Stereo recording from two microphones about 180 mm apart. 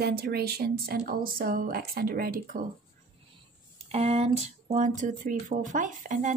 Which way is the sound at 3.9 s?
35° right (ahead or behind).